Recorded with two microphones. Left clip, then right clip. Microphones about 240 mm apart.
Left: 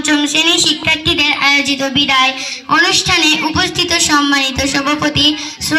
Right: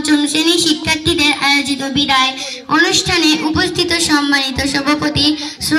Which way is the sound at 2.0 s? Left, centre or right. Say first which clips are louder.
Right 1 dB; centre.